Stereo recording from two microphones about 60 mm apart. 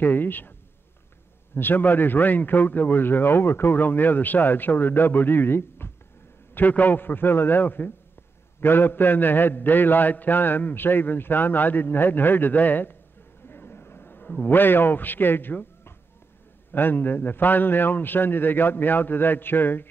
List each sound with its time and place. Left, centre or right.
0.0 s a man's voice: left
1.5 s a man's voice: left
13.5 s a sound: left
14.4 s a man's voice: left